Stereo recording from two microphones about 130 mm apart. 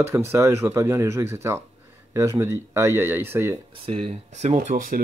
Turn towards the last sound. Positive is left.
turn(degrees=-90)